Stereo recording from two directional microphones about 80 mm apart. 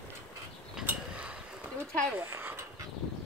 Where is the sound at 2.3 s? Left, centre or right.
Right.